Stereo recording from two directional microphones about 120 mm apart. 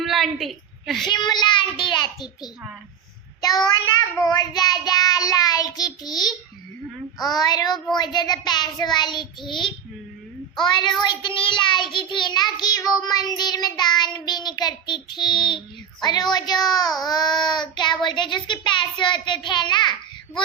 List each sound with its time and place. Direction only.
0.0 s a sound: centre (ahead or behind)
1.0 s child singing: 35° left (ahead or behind)
3.4 s child singing: 35° left (ahead or behind)